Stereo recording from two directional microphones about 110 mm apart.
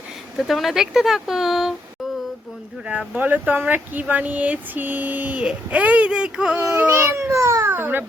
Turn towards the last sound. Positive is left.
turn(degrees=-20)  # may be behind; listen again after turning